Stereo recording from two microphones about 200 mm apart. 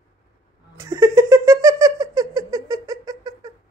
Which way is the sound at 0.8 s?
15° right (ahead or behind).